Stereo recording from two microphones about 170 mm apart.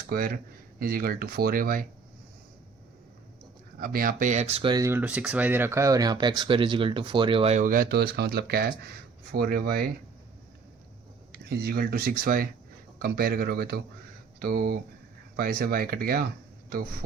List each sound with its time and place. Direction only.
0.1 s speech: 60° right (ahead or behind)
3.8 s speech: 60° right (ahead or behind); by 4.7 s 40° right (ahead or behind)
4.7 s speech: 15° right (ahead or behind); by 7.6 s 35° right (ahead or behind)
7.6 s speech: 55° right (ahead or behind)
11.3 s speech: 65° right (ahead or behind)